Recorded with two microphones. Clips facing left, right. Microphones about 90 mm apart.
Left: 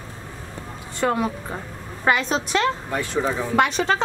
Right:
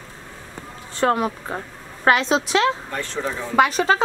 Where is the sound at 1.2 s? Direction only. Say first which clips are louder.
Right 1 dB; 15° right (ahead or behind).